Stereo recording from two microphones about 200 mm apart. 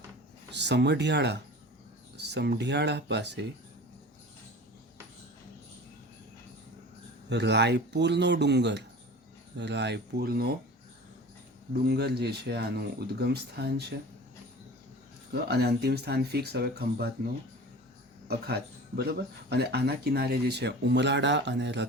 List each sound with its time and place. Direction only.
0.5 s speech: 60° right (ahead or behind)
7.3 s speech: 60° right (ahead or behind)
11.7 s speech: 55° right (ahead or behind)
15.3 s speech: 55° right (ahead or behind)
18.3 s speech: 55° right (ahead or behind)